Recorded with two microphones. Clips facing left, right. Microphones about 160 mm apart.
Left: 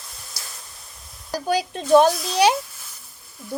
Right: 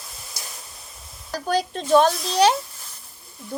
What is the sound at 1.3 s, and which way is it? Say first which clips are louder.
A woman's voice: even; 10° left (ahead or behind).